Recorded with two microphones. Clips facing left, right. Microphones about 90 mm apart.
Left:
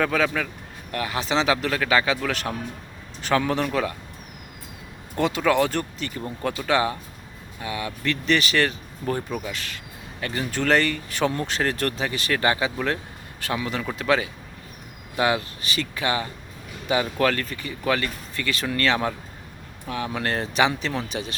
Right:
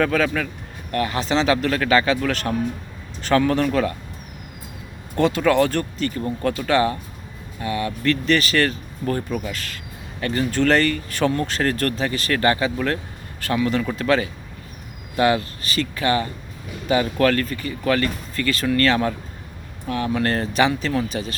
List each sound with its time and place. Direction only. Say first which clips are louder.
0.0 s speech: right 3 dB; 15° left (ahead or behind)
5.1 s speech: right 3 dB; 15° left (ahead or behind)